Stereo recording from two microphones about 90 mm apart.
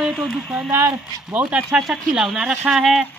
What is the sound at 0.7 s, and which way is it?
Speech, 25° right (ahead or behind).